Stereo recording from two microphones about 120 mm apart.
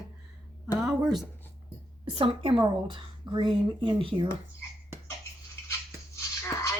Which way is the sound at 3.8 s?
45° right (ahead or behind).